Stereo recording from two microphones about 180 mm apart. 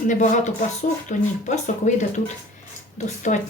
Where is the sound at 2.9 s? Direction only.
45° left (ahead or behind).